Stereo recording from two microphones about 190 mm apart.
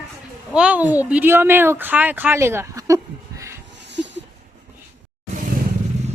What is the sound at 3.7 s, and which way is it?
Dog, 70° right (ahead or behind).